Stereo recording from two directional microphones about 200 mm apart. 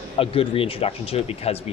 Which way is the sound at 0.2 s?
30° left (ahead or behind).